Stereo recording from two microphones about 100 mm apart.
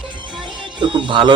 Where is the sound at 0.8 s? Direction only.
55° right (ahead or behind).